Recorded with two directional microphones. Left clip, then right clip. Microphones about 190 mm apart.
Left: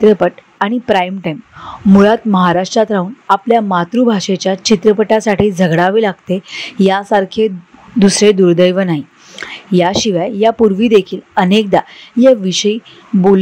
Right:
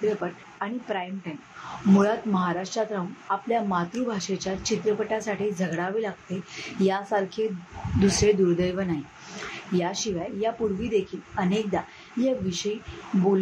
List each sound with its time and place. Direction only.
0.2 s speech: 50° left (ahead or behind)